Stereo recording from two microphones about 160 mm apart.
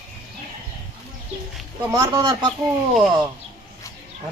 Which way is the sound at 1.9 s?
20° right (ahead or behind).